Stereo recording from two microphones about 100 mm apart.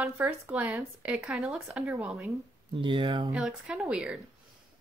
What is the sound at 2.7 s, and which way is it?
Speech, 55° right (ahead or behind).